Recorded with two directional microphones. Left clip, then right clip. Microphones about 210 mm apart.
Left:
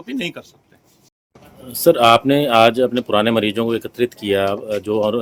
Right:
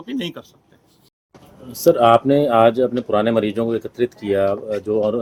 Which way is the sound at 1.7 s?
5° left (ahead or behind).